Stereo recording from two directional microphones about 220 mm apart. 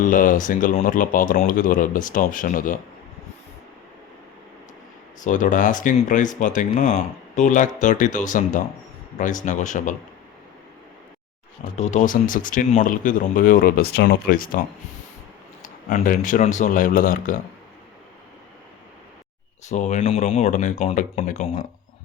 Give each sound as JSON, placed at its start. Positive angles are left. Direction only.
{"t": 0.0, "sound": "speech", "side_deg": 35}
{"t": 5.2, "sound": "speech", "side_deg": 35}
{"t": 11.8, "sound": "speech", "side_deg": 35}
{"t": 15.6, "sound": "speech", "side_deg": 35}
{"t": 19.6, "sound": "speech", "side_deg": 30}